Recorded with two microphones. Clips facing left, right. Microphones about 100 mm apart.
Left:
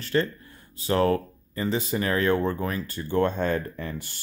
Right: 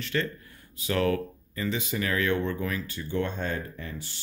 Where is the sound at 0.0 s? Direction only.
35° left (ahead or behind).